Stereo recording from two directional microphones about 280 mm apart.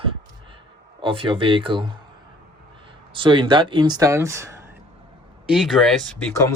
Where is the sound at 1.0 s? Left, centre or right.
Centre.